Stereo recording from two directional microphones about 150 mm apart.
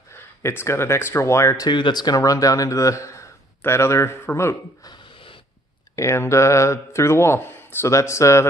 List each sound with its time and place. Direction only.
0.1 s speech: 15° left (ahead or behind)
4.9 s a sound: 35° left (ahead or behind)
5.9 s speech: 20° left (ahead or behind)